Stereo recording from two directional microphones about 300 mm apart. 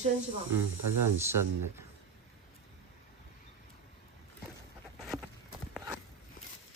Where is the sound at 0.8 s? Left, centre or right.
Right.